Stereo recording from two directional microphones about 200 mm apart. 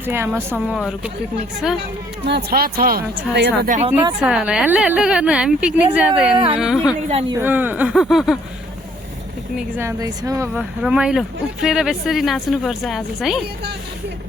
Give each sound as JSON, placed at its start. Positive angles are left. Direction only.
{"t": 0.0, "sound": "speech", "side_deg": -10}
{"t": 2.2, "sound": "speech", "side_deg": -55}
{"t": 3.7, "sound": "speech", "side_deg": -35}
{"t": 4.2, "sound": "speech", "side_deg": -5}
{"t": 6.3, "sound": "speech", "side_deg": -30}
{"t": 6.6, "sound": "speech", "side_deg": -5}
{"t": 7.1, "sound": "speech", "side_deg": -30}
{"t": 7.3, "sound": "speech", "side_deg": -10}
{"t": 9.6, "sound": "speech", "side_deg": -10}
{"t": 10.5, "sound": "speech", "side_deg": -5}